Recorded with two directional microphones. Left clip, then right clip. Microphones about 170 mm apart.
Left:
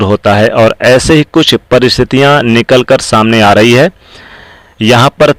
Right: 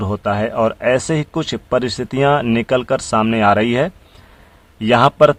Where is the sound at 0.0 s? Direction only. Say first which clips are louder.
Left 12 dB; 30° left (ahead or behind).